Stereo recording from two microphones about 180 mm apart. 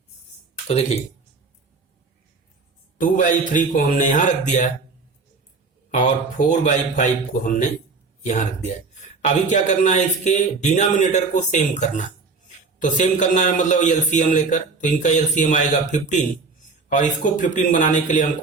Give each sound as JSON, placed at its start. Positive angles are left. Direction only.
{"t": 0.7, "sound": "speech", "side_deg": 35}
{"t": 3.0, "sound": "a man's voice", "side_deg": 45}
{"t": 5.9, "sound": "a man's voice", "side_deg": 45}
{"t": 8.2, "sound": "a man's voice", "side_deg": 45}